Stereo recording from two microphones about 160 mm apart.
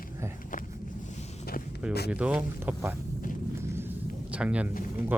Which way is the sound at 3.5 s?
15° right (ahead or behind).